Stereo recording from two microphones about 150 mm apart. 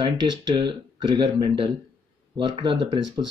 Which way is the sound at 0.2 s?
30° right (ahead or behind).